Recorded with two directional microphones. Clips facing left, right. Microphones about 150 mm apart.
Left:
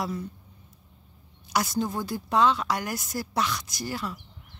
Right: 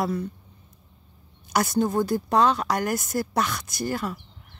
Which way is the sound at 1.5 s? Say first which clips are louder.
Right 5 dB; 50° right (ahead or behind).